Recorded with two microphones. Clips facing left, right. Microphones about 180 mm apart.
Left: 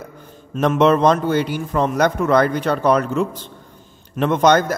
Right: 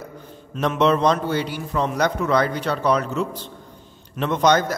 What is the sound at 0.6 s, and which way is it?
A man's voice, 50° left (ahead or behind).